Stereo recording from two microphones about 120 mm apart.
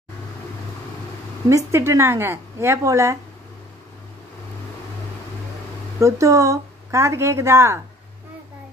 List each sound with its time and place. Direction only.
1.5 s a woman's voice: 25° right (ahead or behind)
5.9 s a woman's voice: 25° right (ahead or behind)